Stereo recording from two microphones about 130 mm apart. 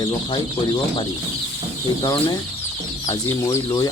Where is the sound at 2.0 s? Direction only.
35° left (ahead or behind).